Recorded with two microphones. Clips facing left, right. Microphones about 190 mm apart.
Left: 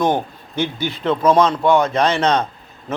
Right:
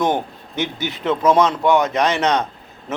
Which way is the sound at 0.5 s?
20° right (ahead or behind).